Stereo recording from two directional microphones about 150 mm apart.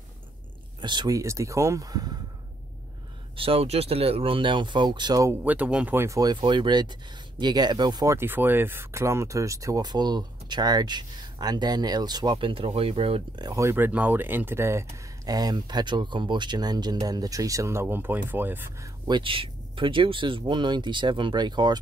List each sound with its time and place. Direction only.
0.7 s speech: 30° right (ahead or behind)
3.3 s speech: 40° right (ahead or behind); by 6.3 s 20° right (ahead or behind)
6.3 s speech: 35° right (ahead or behind)
13.5 s speech: 20° right (ahead or behind)
19.0 s speech: 35° right (ahead or behind)